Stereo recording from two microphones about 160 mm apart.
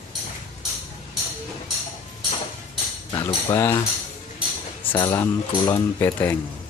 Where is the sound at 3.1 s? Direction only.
25° left (ahead or behind).